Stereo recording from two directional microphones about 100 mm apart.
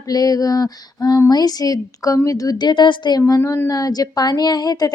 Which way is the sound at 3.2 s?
30° left (ahead or behind).